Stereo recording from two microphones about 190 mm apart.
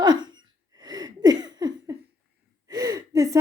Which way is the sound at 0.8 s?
20° right (ahead or behind).